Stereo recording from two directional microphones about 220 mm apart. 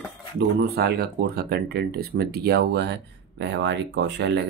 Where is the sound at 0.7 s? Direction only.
45° right (ahead or behind).